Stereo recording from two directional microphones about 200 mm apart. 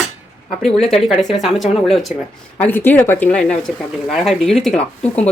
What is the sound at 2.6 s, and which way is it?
Speech, 10° left (ahead or behind).